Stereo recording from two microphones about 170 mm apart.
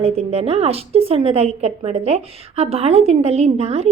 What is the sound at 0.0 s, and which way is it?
A woman's voice, 35° right (ahead or behind).